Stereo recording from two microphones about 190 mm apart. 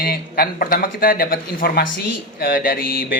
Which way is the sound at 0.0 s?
50° left (ahead or behind).